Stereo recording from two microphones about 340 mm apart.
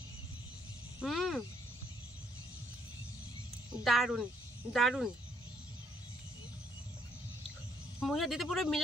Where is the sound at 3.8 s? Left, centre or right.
Centre.